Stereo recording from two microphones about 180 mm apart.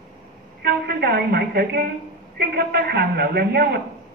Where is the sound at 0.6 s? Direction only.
60° right (ahead or behind).